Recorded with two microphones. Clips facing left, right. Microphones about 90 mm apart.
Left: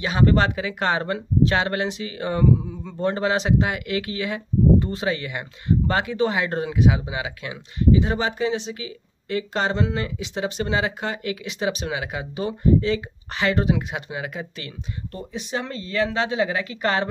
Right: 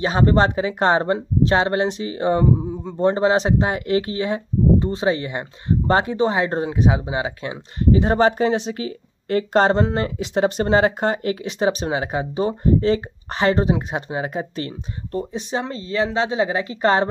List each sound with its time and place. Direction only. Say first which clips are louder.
0.0 s speech: right 3 dB; 30° right (ahead or behind)